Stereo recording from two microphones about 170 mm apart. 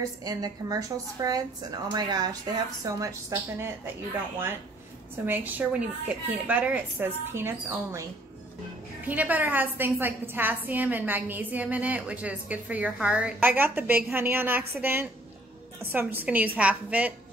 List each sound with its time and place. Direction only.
0.2 s a woman's voice: 20° right (ahead or behind)
5.2 s a woman's voice: 10° right (ahead or behind)
9.0 s a woman's voice: 10° right (ahead or behind)